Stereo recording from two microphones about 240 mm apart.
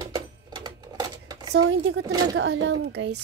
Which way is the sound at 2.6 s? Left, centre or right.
Right.